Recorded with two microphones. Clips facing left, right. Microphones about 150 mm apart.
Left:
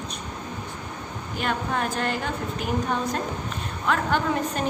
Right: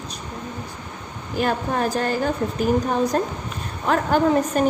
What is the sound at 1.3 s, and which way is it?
A woman's voice, 35° right (ahead or behind).